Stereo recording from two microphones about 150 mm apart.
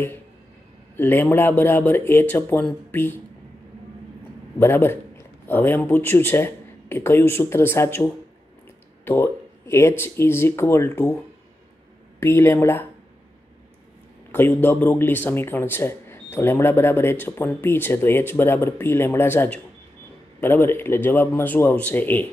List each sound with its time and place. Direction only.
0.9 s a man's voice: 15° left (ahead or behind)
4.6 s a man's voice: 15° left (ahead or behind)
12.2 s a man's voice: 15° left (ahead or behind)
14.3 s a man's voice: 15° left (ahead or behind)